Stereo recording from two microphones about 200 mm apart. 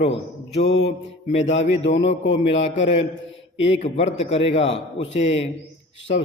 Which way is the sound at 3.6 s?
30° left (ahead or behind).